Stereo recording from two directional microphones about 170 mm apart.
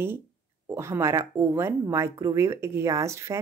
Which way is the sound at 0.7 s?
15° right (ahead or behind).